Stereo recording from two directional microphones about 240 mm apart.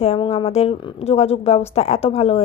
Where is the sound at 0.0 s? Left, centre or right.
Left.